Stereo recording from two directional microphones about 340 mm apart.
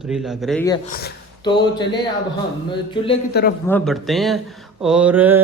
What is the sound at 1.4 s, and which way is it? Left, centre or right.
Speech, centre.